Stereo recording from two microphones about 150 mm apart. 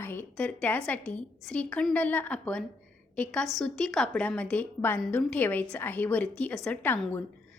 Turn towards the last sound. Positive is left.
turn(degrees=10)  # may be behind; listen again after turning